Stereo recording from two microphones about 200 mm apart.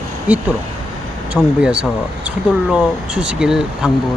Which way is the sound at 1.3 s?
5° right (ahead or behind).